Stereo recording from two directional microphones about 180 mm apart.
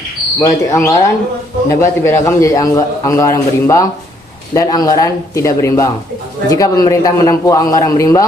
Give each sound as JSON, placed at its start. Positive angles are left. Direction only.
{"t": 0.3, "sound": "a man's voice", "side_deg": 15}